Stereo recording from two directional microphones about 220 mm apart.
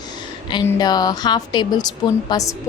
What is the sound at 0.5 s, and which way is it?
A woman's voice, 20° left (ahead or behind).